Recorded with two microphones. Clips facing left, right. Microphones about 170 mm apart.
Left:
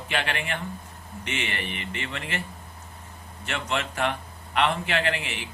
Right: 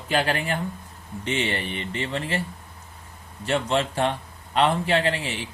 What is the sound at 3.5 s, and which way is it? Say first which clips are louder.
A man's voice: right 6 dB; 35° right (ahead or behind).